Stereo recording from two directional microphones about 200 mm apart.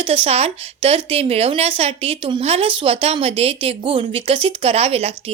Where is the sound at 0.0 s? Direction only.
30° right (ahead or behind).